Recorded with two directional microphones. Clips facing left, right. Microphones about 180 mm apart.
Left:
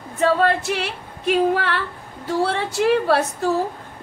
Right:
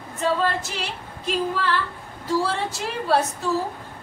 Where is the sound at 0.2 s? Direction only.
60° left (ahead or behind).